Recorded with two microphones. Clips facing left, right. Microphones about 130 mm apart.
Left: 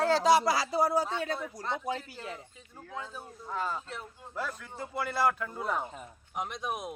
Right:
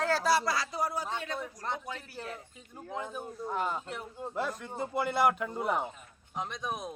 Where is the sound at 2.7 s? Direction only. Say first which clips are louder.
Right 3 dB; 20° right (ahead or behind).